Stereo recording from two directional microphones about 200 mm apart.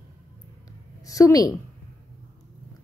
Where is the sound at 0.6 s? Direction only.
15° left (ahead or behind).